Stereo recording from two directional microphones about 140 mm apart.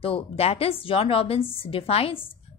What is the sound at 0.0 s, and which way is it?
A woman's voice, 45° left (ahead or behind).